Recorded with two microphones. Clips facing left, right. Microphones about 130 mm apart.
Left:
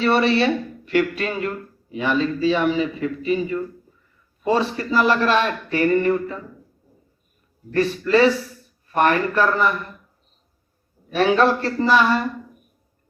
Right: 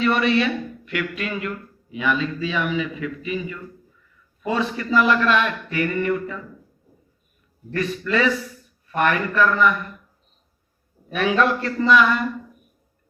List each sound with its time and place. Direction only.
0.0 s speech: 35° left (ahead or behind)
7.7 s speech: 35° left (ahead or behind)
11.1 s speech: 35° left (ahead or behind)